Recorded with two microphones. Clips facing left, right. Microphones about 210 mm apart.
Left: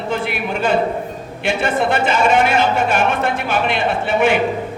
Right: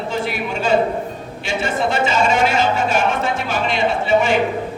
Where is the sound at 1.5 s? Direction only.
55° left (ahead or behind).